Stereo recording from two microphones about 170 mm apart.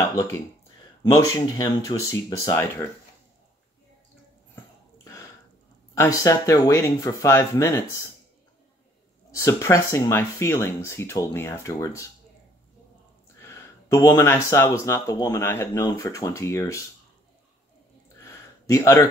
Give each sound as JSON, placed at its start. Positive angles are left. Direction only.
{"t": 0.1, "sound": "speech", "side_deg": 20}
{"t": 5.9, "sound": "speech", "side_deg": 20}
{"t": 9.3, "sound": "speech", "side_deg": 20}
{"t": 13.4, "sound": "speech", "side_deg": 15}
{"t": 18.2, "sound": "a sound", "side_deg": 15}